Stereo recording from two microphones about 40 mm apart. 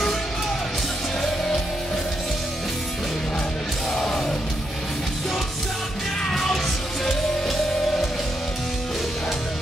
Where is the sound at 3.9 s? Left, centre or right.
Centre.